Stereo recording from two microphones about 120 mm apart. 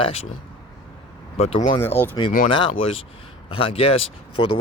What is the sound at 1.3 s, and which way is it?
Speech, 60° left (ahead or behind).